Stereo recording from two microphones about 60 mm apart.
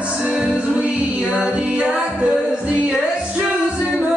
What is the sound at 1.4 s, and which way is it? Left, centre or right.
A capella, centre.